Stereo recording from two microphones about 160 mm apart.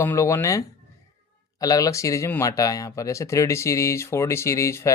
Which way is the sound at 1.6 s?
20° left (ahead or behind).